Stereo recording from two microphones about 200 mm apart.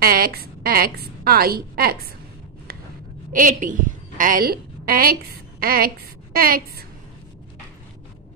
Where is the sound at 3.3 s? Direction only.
40° right (ahead or behind).